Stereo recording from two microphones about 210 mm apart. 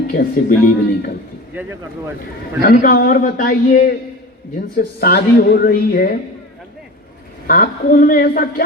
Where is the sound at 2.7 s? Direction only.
45° left (ahead or behind).